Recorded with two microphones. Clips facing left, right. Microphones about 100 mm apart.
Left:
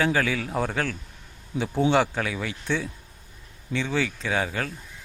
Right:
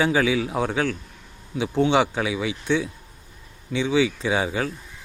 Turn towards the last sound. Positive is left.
turn(degrees=-10)  # may be behind; listen again after turning